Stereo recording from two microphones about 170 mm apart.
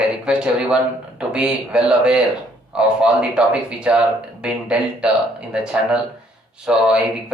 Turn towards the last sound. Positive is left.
turn(degrees=-5)  # may be behind; listen again after turning